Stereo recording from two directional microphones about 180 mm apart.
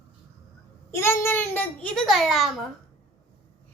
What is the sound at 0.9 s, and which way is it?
A child's voice, 15° left (ahead or behind).